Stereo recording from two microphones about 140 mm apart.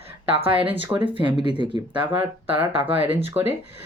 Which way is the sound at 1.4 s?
35° right (ahead or behind).